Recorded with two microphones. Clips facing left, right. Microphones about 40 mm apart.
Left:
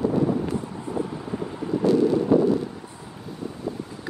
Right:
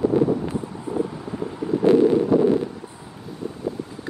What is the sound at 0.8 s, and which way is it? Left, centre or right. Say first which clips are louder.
Wind noise: right 3 dB; centre.